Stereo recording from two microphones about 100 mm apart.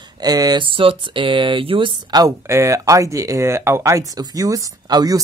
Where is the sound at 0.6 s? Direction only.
60° right (ahead or behind); by 2.3 s 45° right (ahead or behind).